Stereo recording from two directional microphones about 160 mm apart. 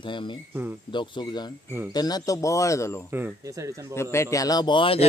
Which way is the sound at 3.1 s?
15° right (ahead or behind).